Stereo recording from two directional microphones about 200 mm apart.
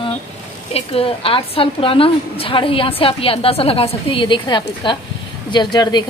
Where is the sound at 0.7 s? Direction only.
30° left (ahead or behind).